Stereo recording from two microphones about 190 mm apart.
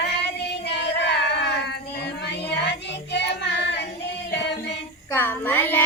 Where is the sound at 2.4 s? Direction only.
65° left (ahead or behind).